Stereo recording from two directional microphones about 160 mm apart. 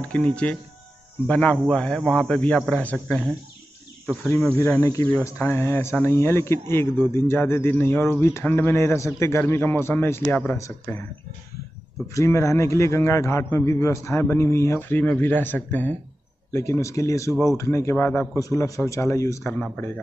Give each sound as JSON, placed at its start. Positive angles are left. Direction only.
{"t": 0.1, "sound": "speech", "side_deg": 5}
{"t": 4.7, "sound": "speech", "side_deg": 15}
{"t": 12.1, "sound": "speech", "side_deg": 20}